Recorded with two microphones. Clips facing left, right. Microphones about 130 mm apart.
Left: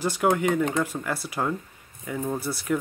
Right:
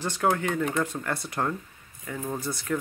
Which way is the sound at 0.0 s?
10° left (ahead or behind).